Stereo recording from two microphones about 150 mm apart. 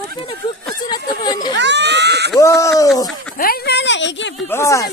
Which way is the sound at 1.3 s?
25° left (ahead or behind).